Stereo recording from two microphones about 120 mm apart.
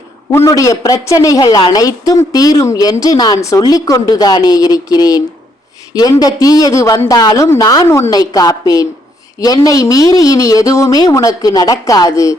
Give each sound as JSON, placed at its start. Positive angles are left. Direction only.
{"t": 0.3, "sound": "speech", "side_deg": 25}
{"t": 7.9, "sound": "speech", "side_deg": 20}
{"t": 8.1, "sound": "speech", "side_deg": 30}